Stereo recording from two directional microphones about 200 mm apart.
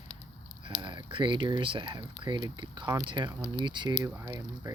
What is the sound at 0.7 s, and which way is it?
Speech, 25° right (ahead or behind).